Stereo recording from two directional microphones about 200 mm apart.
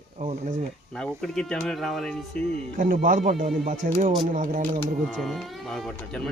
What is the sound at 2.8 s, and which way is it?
Speech, 45° right (ahead or behind).